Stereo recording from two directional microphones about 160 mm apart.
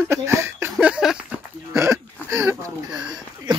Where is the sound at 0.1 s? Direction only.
15° right (ahead or behind).